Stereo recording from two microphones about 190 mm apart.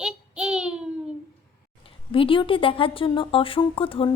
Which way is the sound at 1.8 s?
30° left (ahead or behind).